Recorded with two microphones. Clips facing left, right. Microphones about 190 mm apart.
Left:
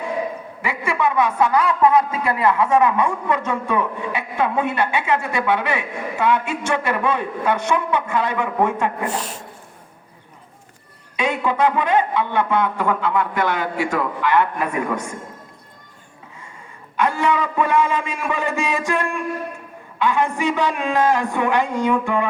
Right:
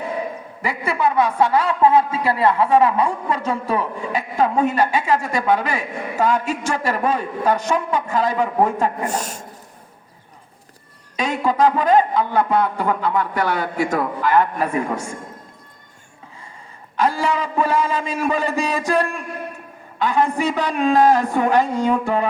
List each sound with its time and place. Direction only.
0.6 s a woman's voice: 35° right (ahead or behind)
11.2 s a woman's voice: 40° right (ahead or behind)
17.0 s a woman's voice: 35° right (ahead or behind)